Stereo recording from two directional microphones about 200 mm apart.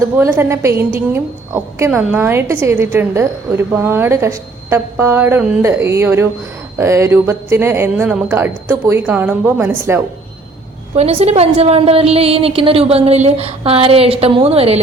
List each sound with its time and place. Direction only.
0.2 s a woman's voice: 10° right (ahead or behind)
10.9 s a woman's voice: 30° right (ahead or behind)